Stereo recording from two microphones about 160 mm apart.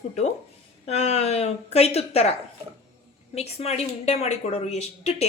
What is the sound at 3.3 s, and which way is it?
A woman's voice, 40° left (ahead or behind).